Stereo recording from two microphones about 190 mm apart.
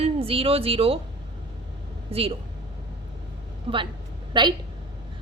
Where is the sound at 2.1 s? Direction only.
30° right (ahead or behind).